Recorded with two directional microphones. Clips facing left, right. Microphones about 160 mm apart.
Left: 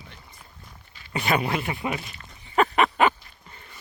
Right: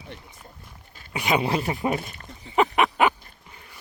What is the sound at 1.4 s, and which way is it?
Speech, 35° right (ahead or behind).